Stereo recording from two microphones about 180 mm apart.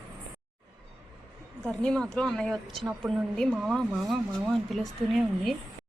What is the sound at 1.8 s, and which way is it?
Speech, 5° left (ahead or behind).